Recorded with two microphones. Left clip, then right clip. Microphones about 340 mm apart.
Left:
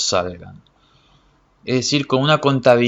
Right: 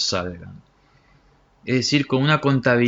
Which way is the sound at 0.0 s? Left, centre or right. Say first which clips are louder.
Left 5 dB; centre.